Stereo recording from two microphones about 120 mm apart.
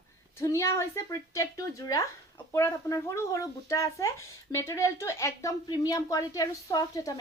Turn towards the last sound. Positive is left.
turn(degrees=30)  # may be behind; listen again after turning